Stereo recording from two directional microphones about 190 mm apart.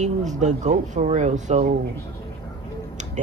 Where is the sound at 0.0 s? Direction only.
40° right (ahead or behind).